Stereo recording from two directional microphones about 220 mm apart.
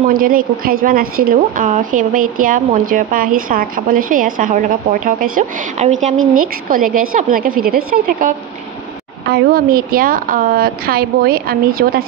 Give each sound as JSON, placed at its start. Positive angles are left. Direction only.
{"t": 0.1, "sound": "speech", "side_deg": -40}
{"t": 6.1, "sound": "a woman's voice", "side_deg": -75}
{"t": 6.7, "sound": "speech", "side_deg": -40}